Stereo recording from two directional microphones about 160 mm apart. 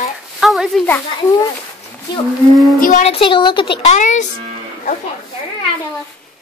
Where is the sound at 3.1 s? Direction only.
35° left (ahead or behind).